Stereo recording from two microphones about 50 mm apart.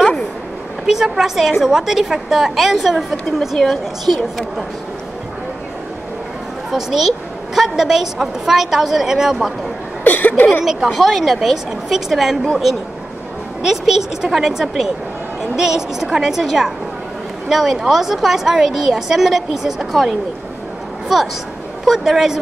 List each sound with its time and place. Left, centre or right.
0.8 s a woman's voice: centre
3.3 s speech: centre
6.7 s a woman's voice: centre
10.0 s a sound: left
10.6 s speech: centre
13.6 s a woman's voice: centre
21.1 s a woman's voice: centre